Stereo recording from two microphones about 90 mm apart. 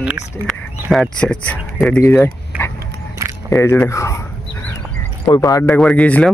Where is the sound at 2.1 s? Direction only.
20° left (ahead or behind).